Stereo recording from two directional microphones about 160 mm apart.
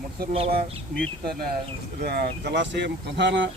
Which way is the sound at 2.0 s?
85° right.